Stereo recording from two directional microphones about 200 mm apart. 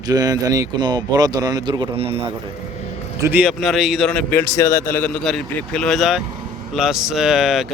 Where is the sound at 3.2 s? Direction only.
5° right (ahead or behind).